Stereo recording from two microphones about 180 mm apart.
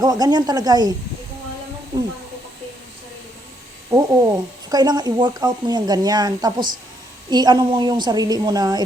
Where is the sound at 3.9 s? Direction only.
20° right (ahead or behind).